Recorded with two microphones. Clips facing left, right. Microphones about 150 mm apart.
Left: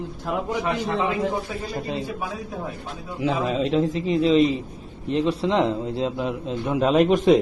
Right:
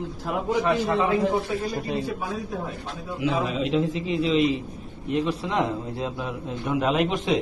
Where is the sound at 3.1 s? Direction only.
35° left (ahead or behind).